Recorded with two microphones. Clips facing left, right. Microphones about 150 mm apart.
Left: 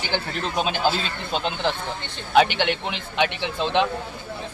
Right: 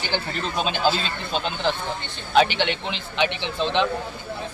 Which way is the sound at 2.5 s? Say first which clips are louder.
Left 1 dB; 55° left (ahead or behind).